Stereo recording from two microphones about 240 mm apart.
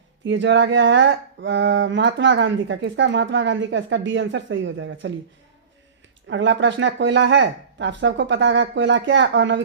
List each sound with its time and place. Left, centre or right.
0.3 s speech: right
6.2 s speech: right